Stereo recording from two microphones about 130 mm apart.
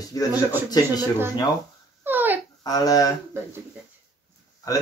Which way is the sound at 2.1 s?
15° right (ahead or behind).